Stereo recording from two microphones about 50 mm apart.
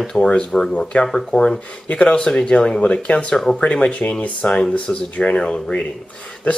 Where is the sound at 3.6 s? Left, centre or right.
Left.